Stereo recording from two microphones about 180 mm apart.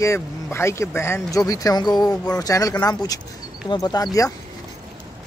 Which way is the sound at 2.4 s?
20° left (ahead or behind).